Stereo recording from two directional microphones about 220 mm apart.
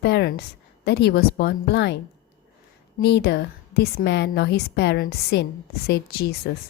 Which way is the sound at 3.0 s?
45° left (ahead or behind).